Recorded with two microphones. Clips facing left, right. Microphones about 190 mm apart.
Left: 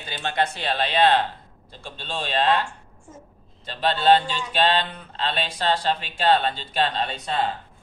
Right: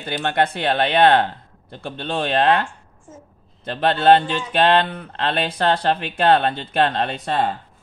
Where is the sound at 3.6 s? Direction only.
55° right (ahead or behind).